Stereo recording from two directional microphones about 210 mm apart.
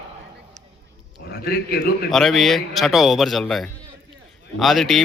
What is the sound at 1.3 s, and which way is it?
Speech, 50° left (ahead or behind).